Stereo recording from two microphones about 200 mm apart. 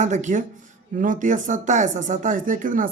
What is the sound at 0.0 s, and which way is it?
Speech, 35° right (ahead or behind).